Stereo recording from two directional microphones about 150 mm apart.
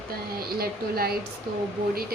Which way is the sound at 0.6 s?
90° right.